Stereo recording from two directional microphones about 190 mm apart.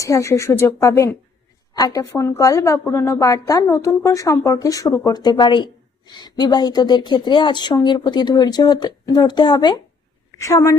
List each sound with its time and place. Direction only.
0.0 s a woman's voice: 15° left (ahead or behind)